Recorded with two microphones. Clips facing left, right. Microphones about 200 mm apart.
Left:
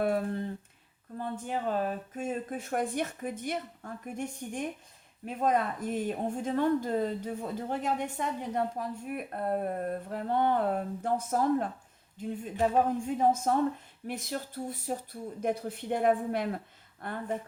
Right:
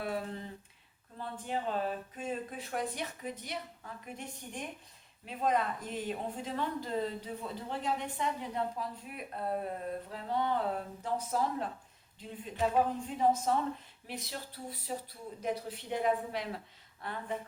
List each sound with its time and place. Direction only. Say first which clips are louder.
0.0 s speech: left 8 dB; 50° left (ahead or behind)